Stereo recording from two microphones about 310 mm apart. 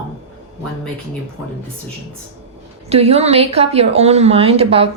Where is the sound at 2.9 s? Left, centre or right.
Centre.